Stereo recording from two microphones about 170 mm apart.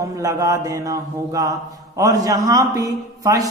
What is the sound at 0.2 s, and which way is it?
A man's voice, 20° right (ahead or behind).